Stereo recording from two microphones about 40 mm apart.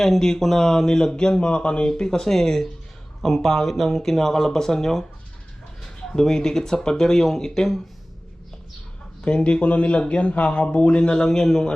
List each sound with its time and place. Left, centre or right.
0.0 s speech: centre
6.1 s speech: centre
9.2 s a man's voice: left